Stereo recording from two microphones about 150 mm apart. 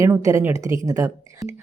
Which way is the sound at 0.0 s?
20° right (ahead or behind).